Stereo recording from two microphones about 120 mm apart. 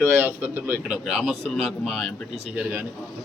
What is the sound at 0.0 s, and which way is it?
A man's voice, 20° right (ahead or behind).